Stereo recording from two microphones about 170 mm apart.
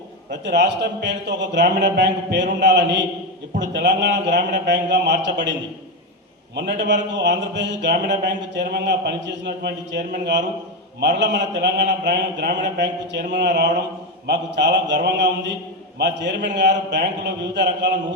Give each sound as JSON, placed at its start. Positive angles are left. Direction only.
{"t": 0.3, "sound": "speech", "side_deg": -90}
{"t": 6.6, "sound": "a man's voice", "side_deg": -85}